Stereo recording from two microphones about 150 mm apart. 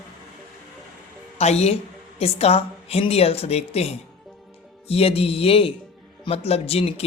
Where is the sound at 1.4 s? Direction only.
45° left (ahead or behind).